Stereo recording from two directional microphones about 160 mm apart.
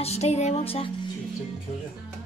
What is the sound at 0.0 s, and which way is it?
Music, 40° left (ahead or behind).